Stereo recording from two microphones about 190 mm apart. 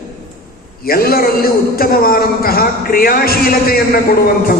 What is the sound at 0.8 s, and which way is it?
A man's voice, 50° left (ahead or behind).